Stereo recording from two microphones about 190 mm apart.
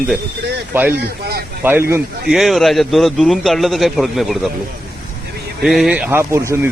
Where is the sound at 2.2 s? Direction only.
Centre (ahead or behind).